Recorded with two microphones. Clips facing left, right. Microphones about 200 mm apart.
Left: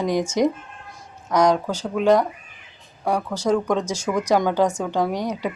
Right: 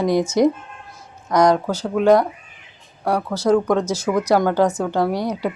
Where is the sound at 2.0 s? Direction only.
10° right (ahead or behind).